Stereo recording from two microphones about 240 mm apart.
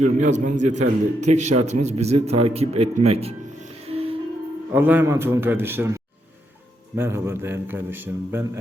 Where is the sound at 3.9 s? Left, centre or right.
Right.